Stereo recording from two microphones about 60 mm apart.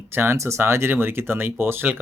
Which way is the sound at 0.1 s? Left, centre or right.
Right.